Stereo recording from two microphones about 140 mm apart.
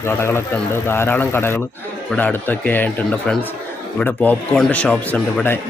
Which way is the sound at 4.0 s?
10° left (ahead or behind).